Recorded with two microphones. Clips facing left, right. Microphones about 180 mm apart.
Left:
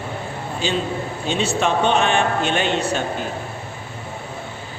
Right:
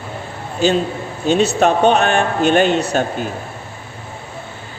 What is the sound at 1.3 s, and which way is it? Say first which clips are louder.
A man's voice: right 7 dB; 40° right (ahead or behind).